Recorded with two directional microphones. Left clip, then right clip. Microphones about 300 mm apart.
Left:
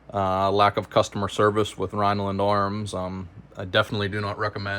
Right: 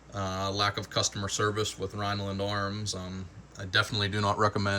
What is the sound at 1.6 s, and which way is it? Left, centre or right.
Speech, left.